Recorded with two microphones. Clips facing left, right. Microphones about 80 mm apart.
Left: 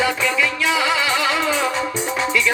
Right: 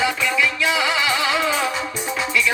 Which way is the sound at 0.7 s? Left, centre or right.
Right.